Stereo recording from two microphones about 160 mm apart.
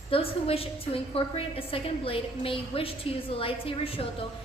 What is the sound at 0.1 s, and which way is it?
A woman's voice, 35° left (ahead or behind).